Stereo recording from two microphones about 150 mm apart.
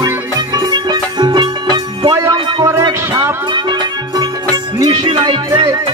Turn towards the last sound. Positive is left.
turn(degrees=-30)  # may be behind; listen again after turning